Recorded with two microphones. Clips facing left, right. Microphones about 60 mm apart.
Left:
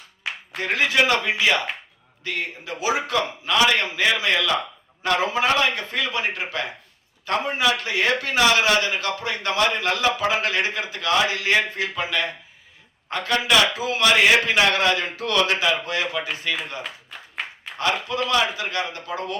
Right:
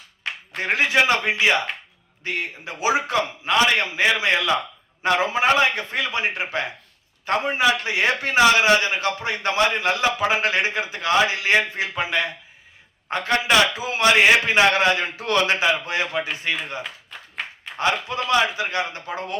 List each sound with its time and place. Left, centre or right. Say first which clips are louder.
0.5 s a man's voice: right 1 dB; right
16.8 s clapping: even; centre
17.7 s a man's voice: right 1 dB; right